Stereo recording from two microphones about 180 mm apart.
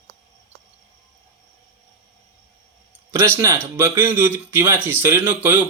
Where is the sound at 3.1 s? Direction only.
15° right (ahead or behind).